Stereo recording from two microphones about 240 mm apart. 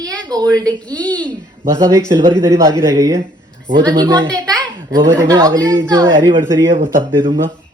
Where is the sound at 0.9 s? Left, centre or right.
Centre.